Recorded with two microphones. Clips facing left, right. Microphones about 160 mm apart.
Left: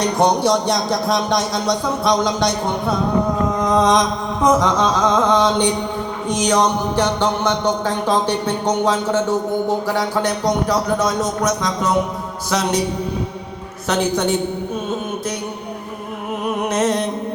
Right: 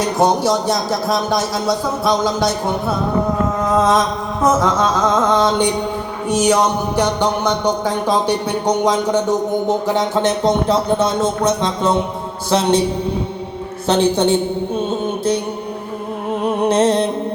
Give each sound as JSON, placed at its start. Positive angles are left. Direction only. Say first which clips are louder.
{"t": 0.0, "sound": "speech", "louder": "right 1 dB", "side_deg": -5}
{"t": 12.5, "sound": "mantra", "louder": "right 5 dB", "side_deg": -30}
{"t": 13.8, "sound": "a man's voice", "louder": "right 4 dB", "side_deg": -30}
{"t": 16.5, "sound": "music", "louder": "right 4 dB", "side_deg": -30}